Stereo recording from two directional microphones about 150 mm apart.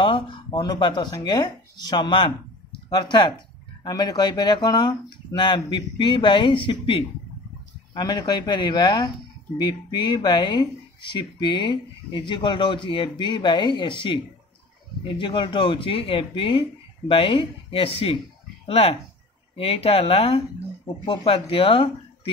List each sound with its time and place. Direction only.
0.0 s speech: 30° left (ahead or behind)